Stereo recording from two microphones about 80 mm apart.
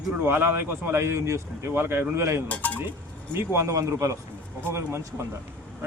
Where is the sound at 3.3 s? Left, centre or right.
Right.